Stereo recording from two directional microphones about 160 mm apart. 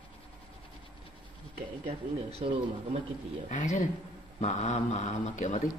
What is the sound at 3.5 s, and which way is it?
A man's voice, 50° left (ahead or behind).